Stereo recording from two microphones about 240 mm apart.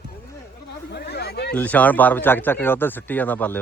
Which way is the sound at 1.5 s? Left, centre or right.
Centre.